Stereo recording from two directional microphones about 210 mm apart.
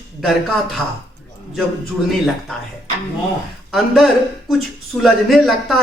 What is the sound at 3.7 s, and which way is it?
Speech, centre (ahead or behind).